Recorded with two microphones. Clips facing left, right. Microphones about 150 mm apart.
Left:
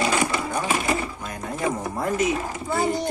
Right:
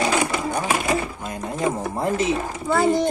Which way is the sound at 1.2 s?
25° right (ahead or behind).